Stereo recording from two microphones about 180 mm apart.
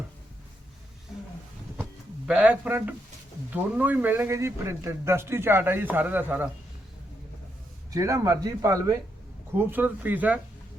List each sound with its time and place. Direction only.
1.8 s a sound: 5° right (ahead or behind)
3.5 s a man's voice: 10° right (ahead or behind)
7.9 s a man's voice: 15° right (ahead or behind)